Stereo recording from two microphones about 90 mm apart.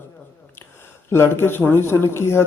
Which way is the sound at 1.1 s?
25° left (ahead or behind).